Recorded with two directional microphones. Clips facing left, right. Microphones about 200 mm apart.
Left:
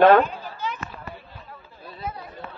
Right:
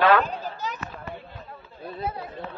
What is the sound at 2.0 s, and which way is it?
Speech, 30° right (ahead or behind).